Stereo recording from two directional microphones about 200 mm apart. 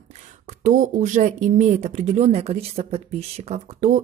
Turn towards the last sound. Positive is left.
turn(degrees=-35)  # may be behind; listen again after turning